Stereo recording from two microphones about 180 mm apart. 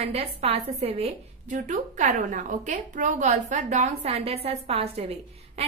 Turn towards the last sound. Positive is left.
turn(degrees=-35)  # may be behind; listen again after turning